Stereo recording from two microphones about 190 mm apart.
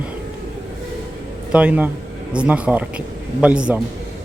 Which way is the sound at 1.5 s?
5° right (ahead or behind).